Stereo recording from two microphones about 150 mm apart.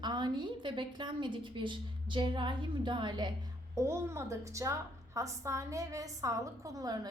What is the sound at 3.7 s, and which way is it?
A woman's voice, 20° right (ahead or behind).